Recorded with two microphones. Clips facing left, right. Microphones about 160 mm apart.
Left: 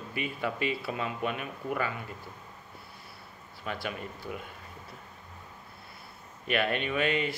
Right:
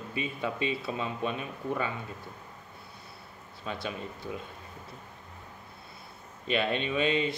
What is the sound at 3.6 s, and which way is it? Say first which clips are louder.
Speech: even; 20° right (ahead or behind).